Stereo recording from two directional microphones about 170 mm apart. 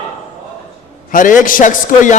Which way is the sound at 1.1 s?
50° left (ahead or behind).